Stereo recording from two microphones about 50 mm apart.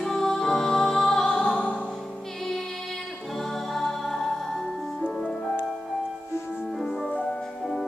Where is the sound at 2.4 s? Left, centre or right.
Centre.